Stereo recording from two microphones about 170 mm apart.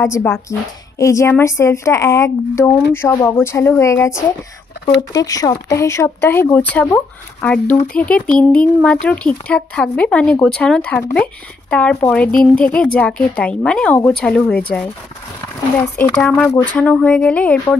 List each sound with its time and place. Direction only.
0.0 s a woman's voice: 15° left (ahead or behind)
16.0 s a woman's voice: 10° left (ahead or behind)